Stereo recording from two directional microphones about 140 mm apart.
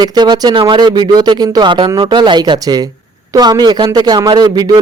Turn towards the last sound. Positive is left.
turn(degrees=-30)  # may be behind; listen again after turning